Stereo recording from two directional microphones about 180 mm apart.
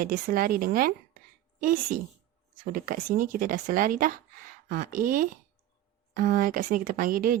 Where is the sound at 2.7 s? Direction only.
50° right (ahead or behind).